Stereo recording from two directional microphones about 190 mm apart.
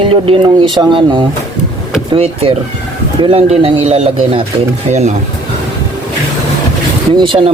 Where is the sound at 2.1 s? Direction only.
30° right (ahead or behind).